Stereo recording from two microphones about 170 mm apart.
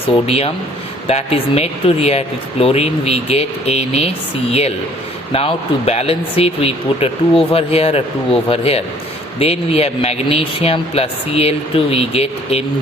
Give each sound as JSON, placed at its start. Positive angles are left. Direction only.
{"t": 0.3, "sound": "speech", "side_deg": 35}